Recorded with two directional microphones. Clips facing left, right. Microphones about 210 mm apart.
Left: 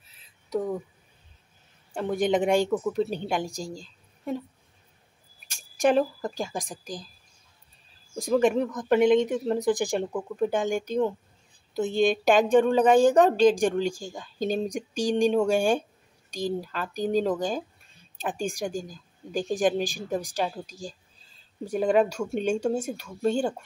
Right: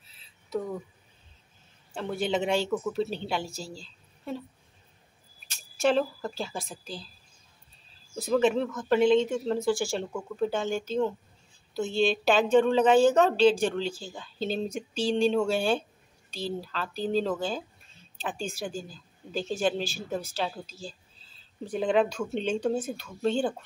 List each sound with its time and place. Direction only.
2.0 s a woman's voice: 15° left (ahead or behind)
5.8 s a woman's voice: 15° left (ahead or behind)
8.2 s a woman's voice: 15° left (ahead or behind)